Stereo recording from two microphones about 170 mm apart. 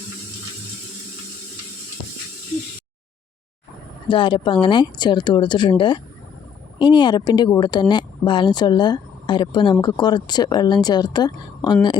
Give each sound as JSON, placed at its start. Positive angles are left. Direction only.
{"t": 4.1, "sound": "speech", "side_deg": 30}